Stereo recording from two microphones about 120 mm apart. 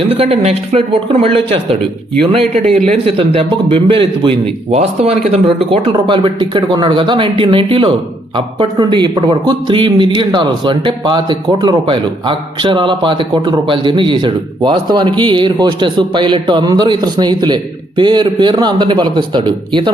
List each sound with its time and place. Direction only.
0.1 s speech: 55° right (ahead or behind)
2.7 s speech: 70° right (ahead or behind)
3.2 s speech: 50° right (ahead or behind)
4.7 s speech: 55° right (ahead or behind); by 19.9 s 40° right (ahead or behind)